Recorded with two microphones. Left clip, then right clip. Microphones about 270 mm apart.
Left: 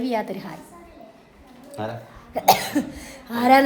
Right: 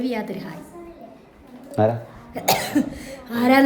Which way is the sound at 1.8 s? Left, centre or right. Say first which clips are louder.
Right 11 dB; right.